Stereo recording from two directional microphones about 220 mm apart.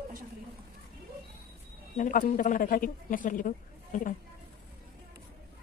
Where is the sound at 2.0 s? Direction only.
35° left (ahead or behind).